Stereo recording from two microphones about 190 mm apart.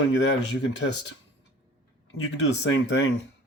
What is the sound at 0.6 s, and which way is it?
Speech, 65° left (ahead or behind).